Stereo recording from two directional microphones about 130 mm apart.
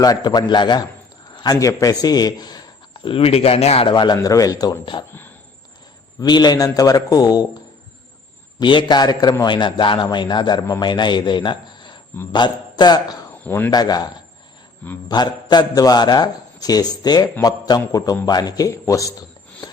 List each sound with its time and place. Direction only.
0.0 s a man's voice: 30° left (ahead or behind); by 3.9 s 50° left (ahead or behind)
3.9 s a man's voice: 30° left (ahead or behind)
6.1 s a man's voice: 35° left (ahead or behind)
8.5 s a man's voice: 35° left (ahead or behind)
13.4 s speech: 15° left (ahead or behind)
13.7 s a man's voice: 30° left (ahead or behind)
15.1 s a man's voice: 35° left (ahead or behind)
19.6 s a sound: 25° left (ahead or behind)